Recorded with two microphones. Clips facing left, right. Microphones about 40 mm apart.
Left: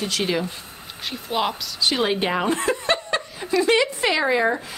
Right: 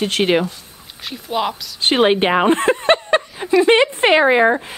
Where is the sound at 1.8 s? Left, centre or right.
Right.